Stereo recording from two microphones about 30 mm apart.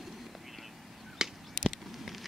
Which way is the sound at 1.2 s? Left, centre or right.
Right.